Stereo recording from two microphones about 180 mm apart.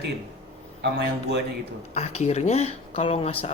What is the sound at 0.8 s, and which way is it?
Speech, 70° right (ahead or behind).